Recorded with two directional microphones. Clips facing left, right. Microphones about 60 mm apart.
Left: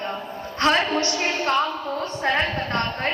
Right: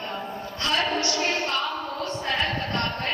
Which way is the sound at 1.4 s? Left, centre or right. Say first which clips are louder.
Left 5 dB; left.